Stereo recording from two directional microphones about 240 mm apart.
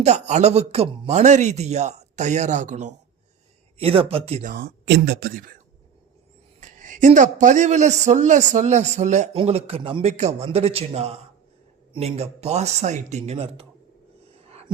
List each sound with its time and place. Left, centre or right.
0.0 s a man's voice: right
6.6 s a man's voice: right